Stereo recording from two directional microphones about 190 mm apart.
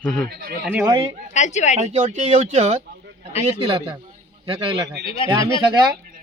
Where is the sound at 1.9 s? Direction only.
35° right (ahead or behind).